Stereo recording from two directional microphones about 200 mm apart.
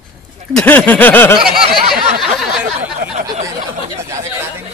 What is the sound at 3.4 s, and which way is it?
Speech, 15° right (ahead or behind).